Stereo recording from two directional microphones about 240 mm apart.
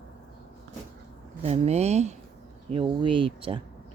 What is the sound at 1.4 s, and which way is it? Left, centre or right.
Speech, right.